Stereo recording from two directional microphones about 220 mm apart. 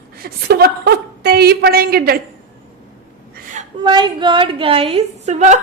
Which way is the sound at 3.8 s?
20° right (ahead or behind).